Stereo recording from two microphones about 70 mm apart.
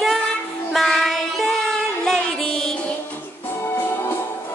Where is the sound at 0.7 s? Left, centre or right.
Centre.